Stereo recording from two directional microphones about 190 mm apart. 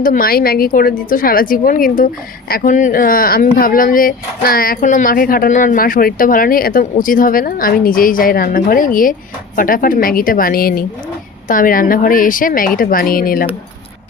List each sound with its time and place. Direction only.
0.0 s speech: 50° left (ahead or behind)